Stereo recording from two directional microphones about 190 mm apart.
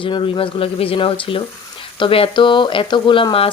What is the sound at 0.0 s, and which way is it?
Speech, 25° left (ahead or behind).